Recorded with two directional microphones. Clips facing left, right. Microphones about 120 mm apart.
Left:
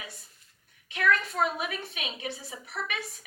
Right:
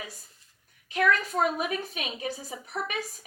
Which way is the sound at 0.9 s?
40° right (ahead or behind).